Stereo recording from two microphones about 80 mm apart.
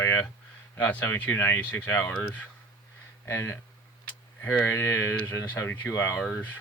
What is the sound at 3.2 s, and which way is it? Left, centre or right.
Speech, left.